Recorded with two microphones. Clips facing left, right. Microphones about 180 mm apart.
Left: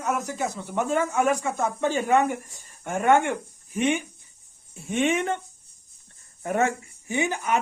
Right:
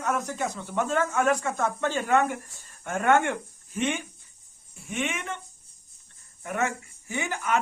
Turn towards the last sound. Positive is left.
turn(degrees=20)  # may be behind; listen again after turning